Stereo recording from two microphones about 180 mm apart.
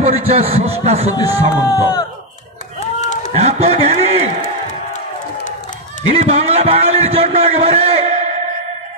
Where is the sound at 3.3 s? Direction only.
35° right (ahead or behind).